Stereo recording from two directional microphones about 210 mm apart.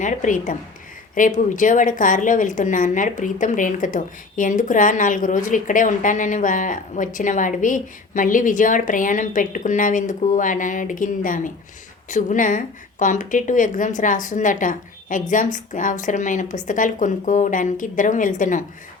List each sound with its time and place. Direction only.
0.0 s a woman's voice: 35° left (ahead or behind)